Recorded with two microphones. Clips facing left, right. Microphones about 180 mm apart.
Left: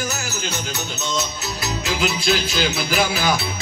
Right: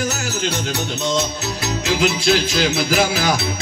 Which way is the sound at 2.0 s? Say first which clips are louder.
Right 4 dB; 75° right (ahead or behind).